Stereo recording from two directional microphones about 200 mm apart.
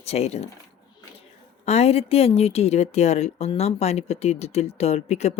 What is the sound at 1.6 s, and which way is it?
Speech, 30° left (ahead or behind).